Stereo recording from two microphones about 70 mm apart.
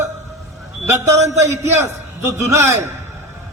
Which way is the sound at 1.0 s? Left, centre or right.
Right.